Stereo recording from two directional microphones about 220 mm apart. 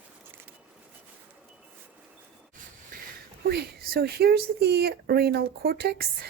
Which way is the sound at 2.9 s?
40° right (ahead or behind).